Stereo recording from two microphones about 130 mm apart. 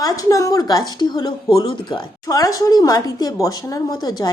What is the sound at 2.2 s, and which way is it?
Speech, 30° left (ahead or behind).